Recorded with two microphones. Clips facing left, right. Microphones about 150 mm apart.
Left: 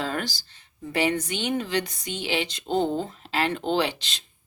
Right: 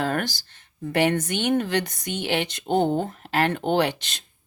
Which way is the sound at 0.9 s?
55° right (ahead or behind).